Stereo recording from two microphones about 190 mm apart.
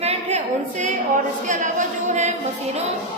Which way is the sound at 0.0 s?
35° right (ahead or behind).